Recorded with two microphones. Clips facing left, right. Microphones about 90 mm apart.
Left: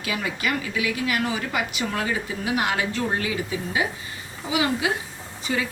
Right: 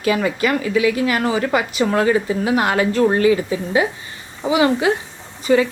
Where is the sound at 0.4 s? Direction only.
45° right (ahead or behind).